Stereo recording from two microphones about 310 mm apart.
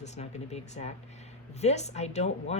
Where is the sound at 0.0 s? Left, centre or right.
Left.